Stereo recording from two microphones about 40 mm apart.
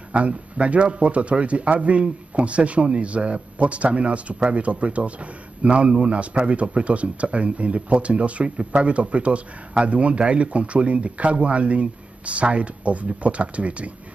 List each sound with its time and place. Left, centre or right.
0.1 s speech: right